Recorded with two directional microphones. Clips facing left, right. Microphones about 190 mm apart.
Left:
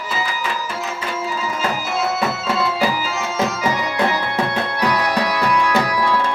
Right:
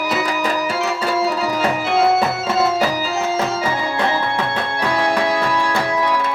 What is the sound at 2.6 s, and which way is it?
Music, 45° right (ahead or behind).